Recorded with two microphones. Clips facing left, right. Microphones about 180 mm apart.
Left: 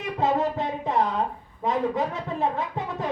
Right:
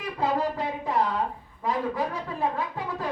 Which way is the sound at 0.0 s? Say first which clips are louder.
Left 3 dB; 20° left (ahead or behind).